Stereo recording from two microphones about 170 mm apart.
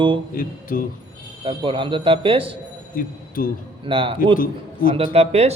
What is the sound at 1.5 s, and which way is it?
Speech, 30° right (ahead or behind).